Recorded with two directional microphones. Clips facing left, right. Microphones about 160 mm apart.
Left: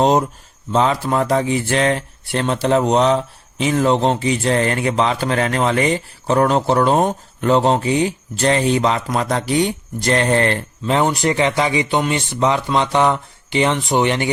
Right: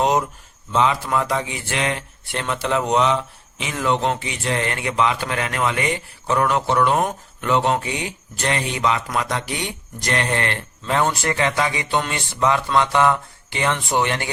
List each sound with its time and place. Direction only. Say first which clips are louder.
0.0 s speech: left 4 dB; 35° left (ahead or behind)
10.9 s speech: left 4 dB; 20° left (ahead or behind)